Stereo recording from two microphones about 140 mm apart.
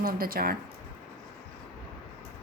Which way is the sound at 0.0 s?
90° right.